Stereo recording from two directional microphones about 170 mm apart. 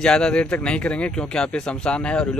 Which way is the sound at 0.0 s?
5° left (ahead or behind).